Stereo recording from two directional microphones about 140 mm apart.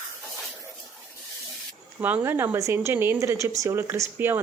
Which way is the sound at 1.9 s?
15° right (ahead or behind).